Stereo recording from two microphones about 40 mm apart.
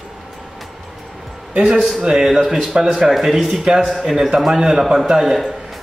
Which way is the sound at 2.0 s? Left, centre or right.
Centre.